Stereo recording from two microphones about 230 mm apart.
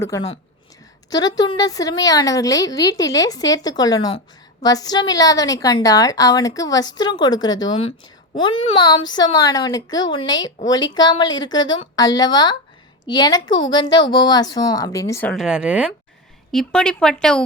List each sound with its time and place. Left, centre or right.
1.1 s a woman's voice: centre